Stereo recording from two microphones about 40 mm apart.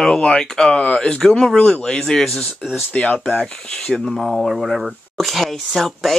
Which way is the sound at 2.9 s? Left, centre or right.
Left.